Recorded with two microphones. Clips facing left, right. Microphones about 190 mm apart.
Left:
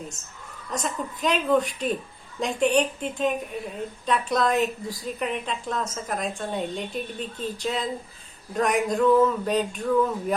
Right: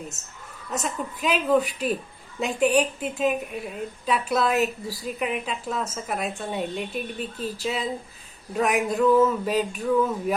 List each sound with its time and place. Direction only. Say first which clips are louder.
0.7 s a woman's voice: even; 5° right (ahead or behind)